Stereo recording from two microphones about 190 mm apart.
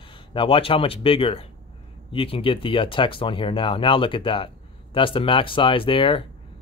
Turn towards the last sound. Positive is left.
turn(degrees=25)  # may be behind; listen again after turning